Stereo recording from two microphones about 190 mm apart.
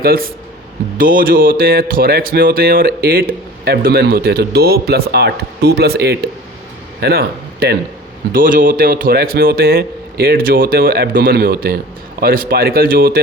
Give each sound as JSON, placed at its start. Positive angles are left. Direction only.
{"t": 0.0, "sound": "speech", "side_deg": -50}
{"t": 8.3, "sound": "speech", "side_deg": -45}